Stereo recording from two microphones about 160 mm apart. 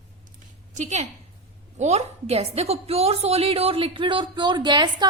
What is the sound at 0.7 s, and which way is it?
A woman's voice, 45° right (ahead or behind).